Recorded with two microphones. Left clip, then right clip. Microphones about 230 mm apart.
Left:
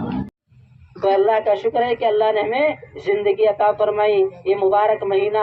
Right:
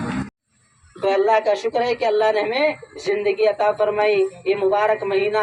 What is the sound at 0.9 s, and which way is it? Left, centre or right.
A woman's voice, right.